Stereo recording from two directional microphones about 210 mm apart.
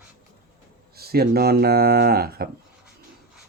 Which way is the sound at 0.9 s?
50° right (ahead or behind).